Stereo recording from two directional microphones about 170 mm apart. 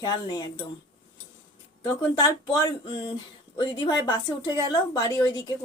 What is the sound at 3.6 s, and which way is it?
Speech, 25° left (ahead or behind).